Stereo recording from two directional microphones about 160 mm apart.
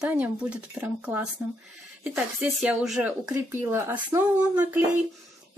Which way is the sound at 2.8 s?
5° right (ahead or behind).